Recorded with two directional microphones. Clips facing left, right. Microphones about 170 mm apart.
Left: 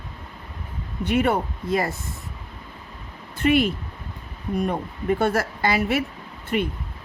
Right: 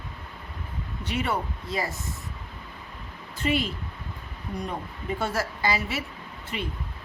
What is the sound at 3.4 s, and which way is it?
Speech, 60° left (ahead or behind).